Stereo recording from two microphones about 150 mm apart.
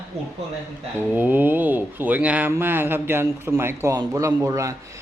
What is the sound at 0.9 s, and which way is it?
A man's voice, 15° right (ahead or behind).